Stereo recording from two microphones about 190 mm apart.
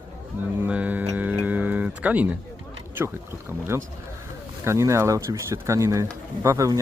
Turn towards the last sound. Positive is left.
turn(degrees=-15)  # may be behind; listen again after turning